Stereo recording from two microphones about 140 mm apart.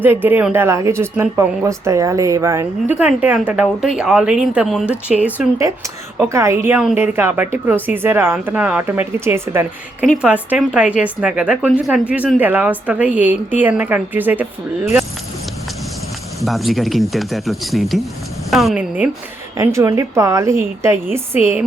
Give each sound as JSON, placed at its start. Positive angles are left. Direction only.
{"t": 0.0, "sound": "speech", "side_deg": -15}
{"t": 6.1, "sound": "speech", "side_deg": -20}
{"t": 16.4, "sound": "speech", "side_deg": 0}
{"t": 19.5, "sound": "a woman's voice", "side_deg": -20}